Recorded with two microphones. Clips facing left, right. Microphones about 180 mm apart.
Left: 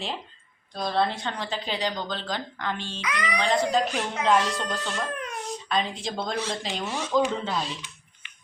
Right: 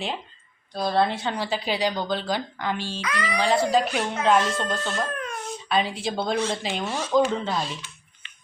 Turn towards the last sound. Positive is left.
turn(degrees=-5)  # may be behind; listen again after turning